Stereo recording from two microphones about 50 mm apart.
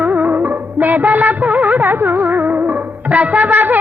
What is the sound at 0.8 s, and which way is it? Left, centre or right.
Music of bollywood, right.